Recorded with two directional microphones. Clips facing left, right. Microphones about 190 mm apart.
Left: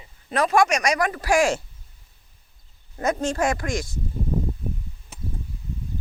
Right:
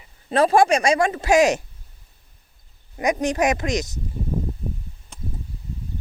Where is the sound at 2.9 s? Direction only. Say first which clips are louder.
Right 2 dB; 15° right (ahead or behind).